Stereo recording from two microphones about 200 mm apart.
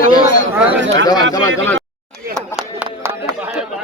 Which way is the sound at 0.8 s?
70° right (ahead or behind).